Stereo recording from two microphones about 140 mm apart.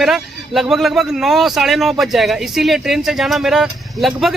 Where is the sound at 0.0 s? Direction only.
Centre (ahead or behind).